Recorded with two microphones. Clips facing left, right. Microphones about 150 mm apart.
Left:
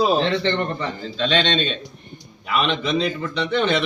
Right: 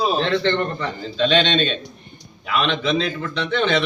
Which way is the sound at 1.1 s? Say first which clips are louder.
Right 3 dB; centre (ahead or behind).